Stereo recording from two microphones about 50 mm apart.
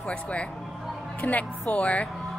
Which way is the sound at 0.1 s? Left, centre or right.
Left.